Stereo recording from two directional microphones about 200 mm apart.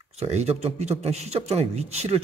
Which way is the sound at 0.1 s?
35° right (ahead or behind).